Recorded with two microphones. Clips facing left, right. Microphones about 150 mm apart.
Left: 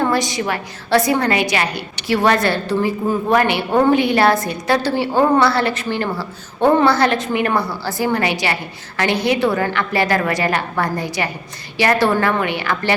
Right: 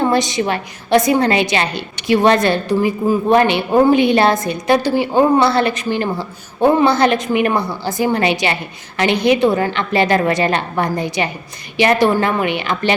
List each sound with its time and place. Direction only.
0.0 s a woman's voice: 20° right (ahead or behind)